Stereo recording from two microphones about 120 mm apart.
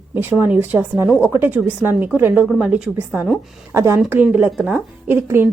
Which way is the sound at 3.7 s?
25° right (ahead or behind).